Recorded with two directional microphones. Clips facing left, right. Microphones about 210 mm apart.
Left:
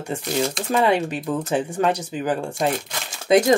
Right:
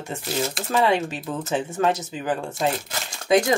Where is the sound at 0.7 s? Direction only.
15° left (ahead or behind).